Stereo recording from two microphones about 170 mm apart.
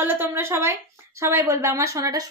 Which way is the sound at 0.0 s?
10° right (ahead or behind).